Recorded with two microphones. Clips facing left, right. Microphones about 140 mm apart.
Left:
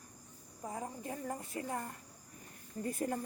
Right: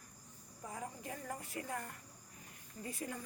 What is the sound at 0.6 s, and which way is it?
A woman's voice, 30° left (ahead or behind).